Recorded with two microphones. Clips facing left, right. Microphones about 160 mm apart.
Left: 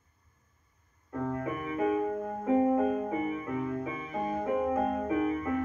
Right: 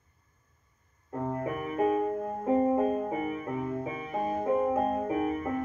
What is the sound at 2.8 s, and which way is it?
Music, 35° right (ahead or behind).